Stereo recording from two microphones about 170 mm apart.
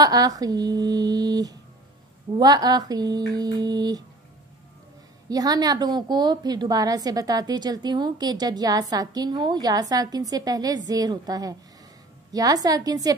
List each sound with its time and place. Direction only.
0.0 s a woman's voice: 20° right (ahead or behind)
5.3 s a woman's voice: 20° right (ahead or behind)